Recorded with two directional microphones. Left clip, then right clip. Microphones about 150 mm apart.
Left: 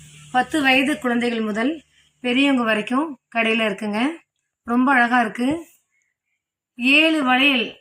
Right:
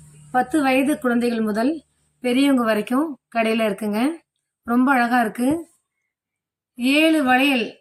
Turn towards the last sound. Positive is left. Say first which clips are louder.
# even
turn(degrees=-10)  # may be behind; listen again after turning